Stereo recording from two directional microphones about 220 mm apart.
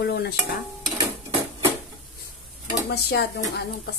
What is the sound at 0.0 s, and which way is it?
Stir, 50° left (ahead or behind).